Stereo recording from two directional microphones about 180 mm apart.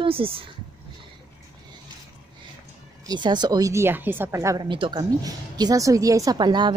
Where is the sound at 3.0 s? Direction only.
25° right (ahead or behind).